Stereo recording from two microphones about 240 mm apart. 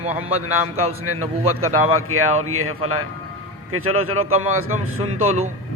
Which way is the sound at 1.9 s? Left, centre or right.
Right.